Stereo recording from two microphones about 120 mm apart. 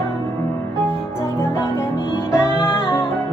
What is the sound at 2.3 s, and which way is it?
Music, 20° left (ahead or behind).